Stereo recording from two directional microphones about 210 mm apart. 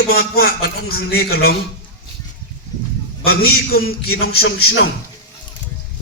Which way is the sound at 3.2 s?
45° left (ahead or behind).